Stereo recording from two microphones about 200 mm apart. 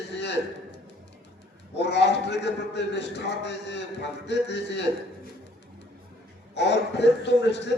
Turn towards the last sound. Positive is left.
turn(degrees=60)  # may be behind; listen again after turning